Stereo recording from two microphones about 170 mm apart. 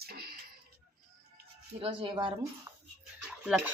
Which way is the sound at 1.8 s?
35° right (ahead or behind).